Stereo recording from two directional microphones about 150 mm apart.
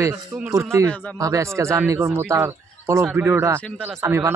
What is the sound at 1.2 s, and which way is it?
Speech, 20° right (ahead or behind).